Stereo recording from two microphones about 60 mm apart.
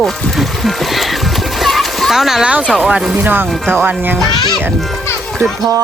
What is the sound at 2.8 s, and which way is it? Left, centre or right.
Speech, centre.